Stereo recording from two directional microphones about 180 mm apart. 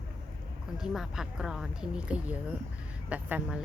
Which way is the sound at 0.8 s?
5° right (ahead or behind).